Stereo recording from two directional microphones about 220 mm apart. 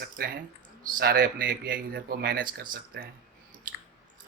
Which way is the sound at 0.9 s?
45° right (ahead or behind).